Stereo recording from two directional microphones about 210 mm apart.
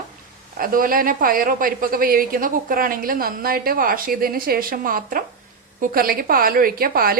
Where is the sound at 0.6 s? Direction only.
40° right (ahead or behind).